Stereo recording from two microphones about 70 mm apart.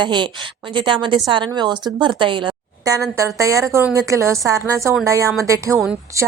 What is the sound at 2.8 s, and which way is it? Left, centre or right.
A woman's voice, right.